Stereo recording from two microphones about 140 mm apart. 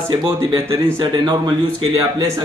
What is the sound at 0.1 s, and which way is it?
Speech, 30° right (ahead or behind).